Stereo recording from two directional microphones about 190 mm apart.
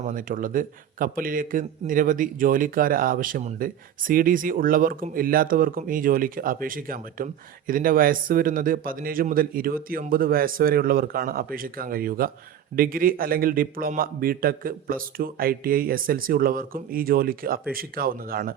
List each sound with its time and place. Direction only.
0.0 s speech: 45° right (ahead or behind)